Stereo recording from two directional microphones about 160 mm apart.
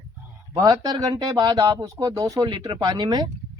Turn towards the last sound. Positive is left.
turn(degrees=-25)  # may be behind; listen again after turning